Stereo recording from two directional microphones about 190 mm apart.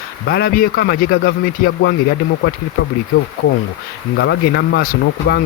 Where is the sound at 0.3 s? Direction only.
55° left (ahead or behind).